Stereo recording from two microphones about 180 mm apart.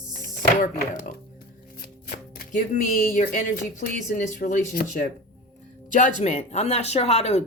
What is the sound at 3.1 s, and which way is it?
Speech, 45° left (ahead or behind).